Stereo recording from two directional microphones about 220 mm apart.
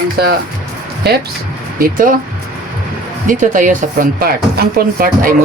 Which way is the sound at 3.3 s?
35° right (ahead or behind).